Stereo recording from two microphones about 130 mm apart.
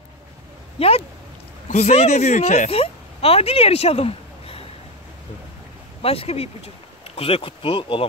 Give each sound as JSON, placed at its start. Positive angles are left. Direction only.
{"t": 0.7, "sound": "speech", "side_deg": 50}
{"t": 6.0, "sound": "speech", "side_deg": 50}